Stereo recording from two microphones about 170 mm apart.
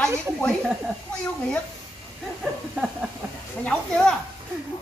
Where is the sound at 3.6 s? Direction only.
5° left (ahead or behind).